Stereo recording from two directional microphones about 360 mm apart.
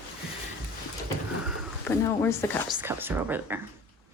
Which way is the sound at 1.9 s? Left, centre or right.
Centre.